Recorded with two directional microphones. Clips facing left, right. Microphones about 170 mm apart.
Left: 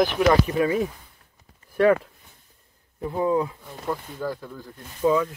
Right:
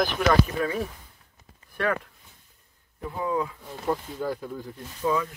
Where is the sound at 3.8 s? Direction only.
15° right (ahead or behind).